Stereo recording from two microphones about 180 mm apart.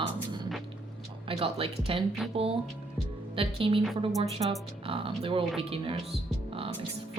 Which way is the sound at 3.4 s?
30° right (ahead or behind).